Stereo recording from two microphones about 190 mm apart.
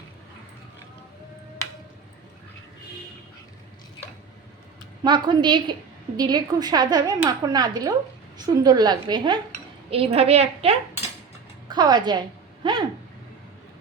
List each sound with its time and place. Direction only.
5.0 s a woman's voice: 25° right (ahead or behind)
11.7 s speech: 20° right (ahead or behind)